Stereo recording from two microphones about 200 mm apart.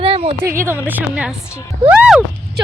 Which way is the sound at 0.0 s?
30° right (ahead or behind).